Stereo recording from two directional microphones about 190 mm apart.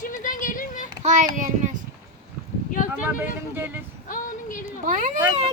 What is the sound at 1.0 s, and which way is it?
Speech, 40° right (ahead or behind).